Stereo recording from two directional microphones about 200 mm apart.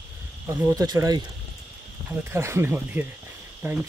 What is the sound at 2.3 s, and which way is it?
Speech, 10° right (ahead or behind).